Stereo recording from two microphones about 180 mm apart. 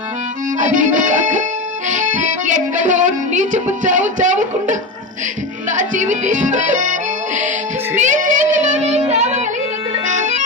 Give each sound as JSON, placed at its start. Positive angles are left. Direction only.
{"t": 0.6, "sound": "music", "side_deg": -45}
{"t": 7.9, "sound": "child singing", "side_deg": -45}
{"t": 9.9, "sound": "music", "side_deg": -40}